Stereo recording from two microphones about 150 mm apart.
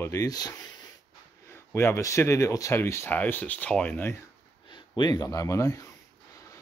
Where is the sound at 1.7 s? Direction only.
15° left (ahead or behind).